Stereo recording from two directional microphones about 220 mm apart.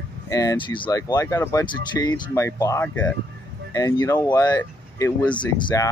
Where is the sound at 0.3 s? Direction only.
15° left (ahead or behind).